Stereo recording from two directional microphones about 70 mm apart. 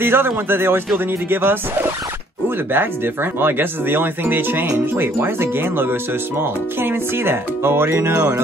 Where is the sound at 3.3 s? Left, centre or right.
Right.